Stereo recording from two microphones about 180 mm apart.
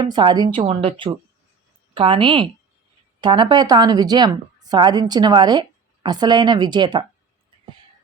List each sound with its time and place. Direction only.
0.0 s a woman's voice: 25° right (ahead or behind)
0.5 s a woman's voice: 35° right (ahead or behind)